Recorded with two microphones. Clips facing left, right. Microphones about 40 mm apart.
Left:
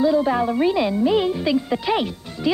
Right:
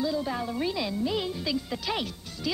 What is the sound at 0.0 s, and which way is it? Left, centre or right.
Speech, left.